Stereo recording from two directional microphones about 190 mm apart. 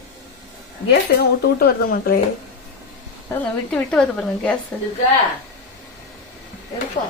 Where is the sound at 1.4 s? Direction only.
50° left (ahead or behind).